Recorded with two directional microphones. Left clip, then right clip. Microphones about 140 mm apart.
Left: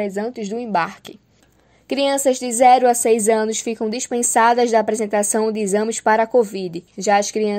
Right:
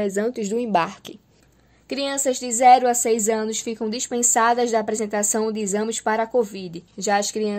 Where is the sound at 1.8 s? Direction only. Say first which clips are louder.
Left 6 dB; 30° left (ahead or behind).